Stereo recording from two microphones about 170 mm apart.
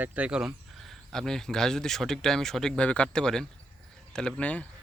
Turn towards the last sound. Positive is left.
turn(degrees=10)  # may be behind; listen again after turning